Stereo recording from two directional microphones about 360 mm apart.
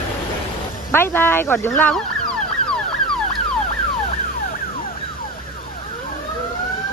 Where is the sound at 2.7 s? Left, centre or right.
Centre.